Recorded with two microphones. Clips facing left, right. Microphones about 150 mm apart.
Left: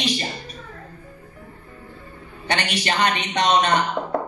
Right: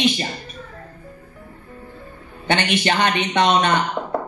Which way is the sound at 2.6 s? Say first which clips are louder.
Right 2 dB; 40° left (ahead or behind).